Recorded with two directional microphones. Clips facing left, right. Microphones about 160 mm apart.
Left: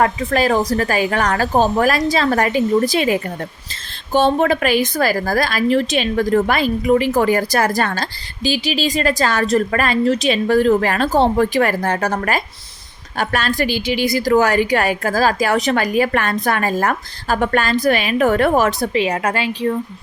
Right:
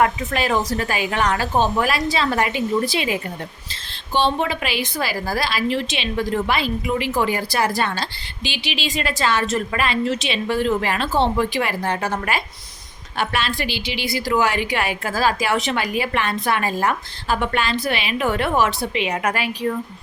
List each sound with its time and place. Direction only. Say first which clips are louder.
0.3 s a woman's voice: left 6 dB; 40° left (ahead or behind)